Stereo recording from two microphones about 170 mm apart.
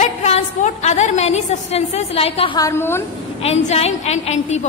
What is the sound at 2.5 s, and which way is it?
Speech, 15° left (ahead or behind).